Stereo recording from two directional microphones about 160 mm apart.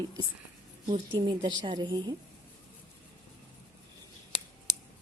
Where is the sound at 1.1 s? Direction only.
30° right (ahead or behind).